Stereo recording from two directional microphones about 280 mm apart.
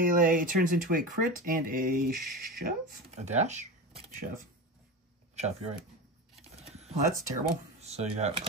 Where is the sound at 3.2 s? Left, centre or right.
Right.